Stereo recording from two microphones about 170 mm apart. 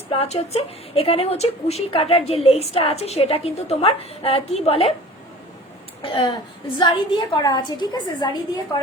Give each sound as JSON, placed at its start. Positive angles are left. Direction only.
{"t": 0.1, "sound": "a woman's voice", "side_deg": 35}
{"t": 6.0, "sound": "a woman's voice", "side_deg": 30}